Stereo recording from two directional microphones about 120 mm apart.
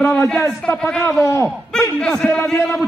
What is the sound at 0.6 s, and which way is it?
A man's voice, 10° left (ahead or behind).